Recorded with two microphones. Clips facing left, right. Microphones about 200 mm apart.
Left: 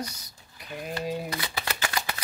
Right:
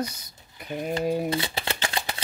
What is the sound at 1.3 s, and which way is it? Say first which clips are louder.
Shuffling cards: right 5 dB; 25° right (ahead or behind).